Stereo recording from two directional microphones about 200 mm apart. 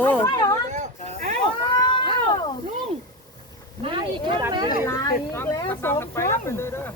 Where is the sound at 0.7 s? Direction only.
35° right (ahead or behind).